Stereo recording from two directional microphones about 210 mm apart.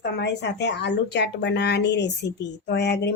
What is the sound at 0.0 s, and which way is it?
Speech, 55° left (ahead or behind).